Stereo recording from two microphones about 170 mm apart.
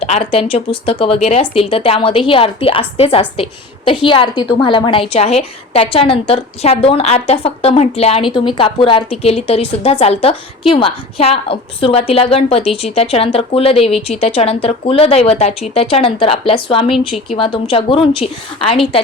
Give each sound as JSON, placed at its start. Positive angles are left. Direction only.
{"t": 0.0, "sound": "a woman's voice", "side_deg": 35}